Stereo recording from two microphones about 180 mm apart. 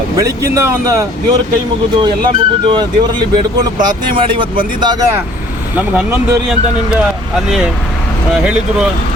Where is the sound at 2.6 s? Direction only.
25° right (ahead or behind).